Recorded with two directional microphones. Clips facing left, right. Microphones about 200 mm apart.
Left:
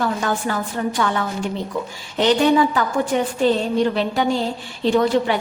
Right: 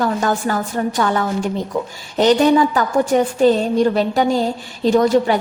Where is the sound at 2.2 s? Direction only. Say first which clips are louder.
Right 3 dB; 40° right (ahead or behind).